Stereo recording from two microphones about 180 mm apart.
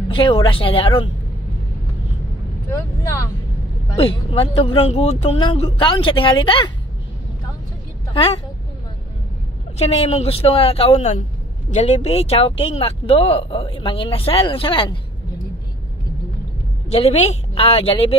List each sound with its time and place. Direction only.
0.1 s speech: 25° left (ahead or behind)
3.9 s speech: 30° left (ahead or behind)
9.8 s speech: 35° left (ahead or behind)
16.9 s speech: 35° left (ahead or behind)